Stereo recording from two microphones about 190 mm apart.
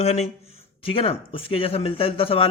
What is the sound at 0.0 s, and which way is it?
A man's voice, 35° left (ahead or behind).